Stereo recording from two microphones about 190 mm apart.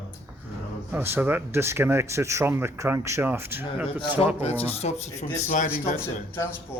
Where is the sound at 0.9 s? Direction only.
10° right (ahead or behind).